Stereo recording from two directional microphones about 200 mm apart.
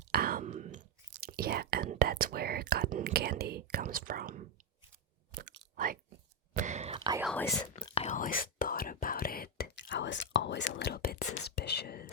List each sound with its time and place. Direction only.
0.1 s whispering: 50° right (ahead or behind)
1.2 s speech: 50° right (ahead or behind)
5.4 s chewing: 45° right (ahead or behind)
6.5 s whispering: 35° right (ahead or behind)
7.9 s speech: 30° left (ahead or behind); by 12.1 s 50° left (ahead or behind)